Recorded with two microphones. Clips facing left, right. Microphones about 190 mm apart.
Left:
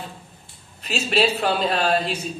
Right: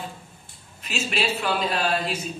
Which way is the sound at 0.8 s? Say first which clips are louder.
Left 6 dB; 35° left (ahead or behind).